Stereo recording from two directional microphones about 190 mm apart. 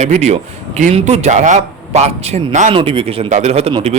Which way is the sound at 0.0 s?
35° right (ahead or behind).